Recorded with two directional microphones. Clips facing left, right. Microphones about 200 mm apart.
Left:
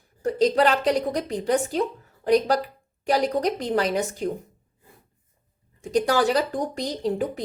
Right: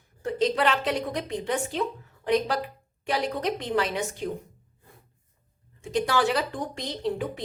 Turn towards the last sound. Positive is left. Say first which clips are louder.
# left 4 dB
turn(degrees=40)  # may be behind; listen again after turning